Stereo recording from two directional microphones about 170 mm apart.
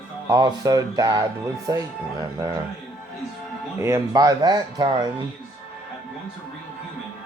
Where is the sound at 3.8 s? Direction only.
15° right (ahead or behind).